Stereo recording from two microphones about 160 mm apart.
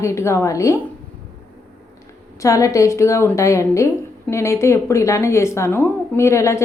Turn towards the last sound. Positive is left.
turn(degrees=20)  # may be behind; listen again after turning